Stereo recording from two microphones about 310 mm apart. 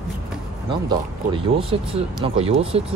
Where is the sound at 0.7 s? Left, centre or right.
Centre.